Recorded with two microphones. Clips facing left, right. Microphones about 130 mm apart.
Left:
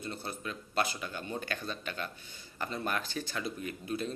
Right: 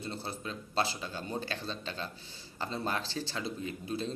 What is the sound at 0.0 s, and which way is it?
Speech, 30° right (ahead or behind).